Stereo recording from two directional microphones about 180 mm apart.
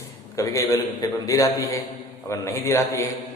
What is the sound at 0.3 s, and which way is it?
A man's voice, 15° left (ahead or behind).